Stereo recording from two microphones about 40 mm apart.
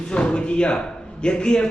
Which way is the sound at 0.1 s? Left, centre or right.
Left.